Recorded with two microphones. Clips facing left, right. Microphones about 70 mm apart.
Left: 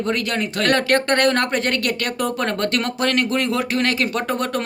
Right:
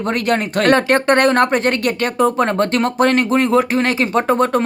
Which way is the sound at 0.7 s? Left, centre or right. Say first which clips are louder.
Right 4 dB; right.